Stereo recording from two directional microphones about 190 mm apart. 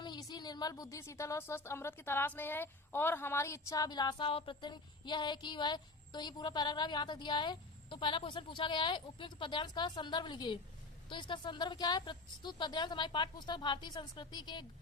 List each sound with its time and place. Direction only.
0.0 s a woman's voice: 20° left (ahead or behind)